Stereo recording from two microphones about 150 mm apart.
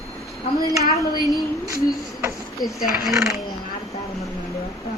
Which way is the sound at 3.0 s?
5° right (ahead or behind).